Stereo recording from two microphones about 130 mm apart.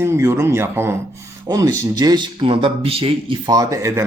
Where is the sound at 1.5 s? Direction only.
30° right (ahead or behind); by 3.4 s 45° right (ahead or behind).